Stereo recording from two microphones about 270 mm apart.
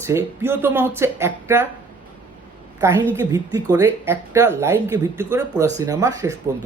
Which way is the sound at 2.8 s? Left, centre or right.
Centre.